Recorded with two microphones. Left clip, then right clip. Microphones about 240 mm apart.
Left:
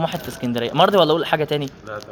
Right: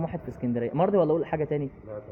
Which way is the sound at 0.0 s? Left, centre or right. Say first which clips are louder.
Left 9 dB; left.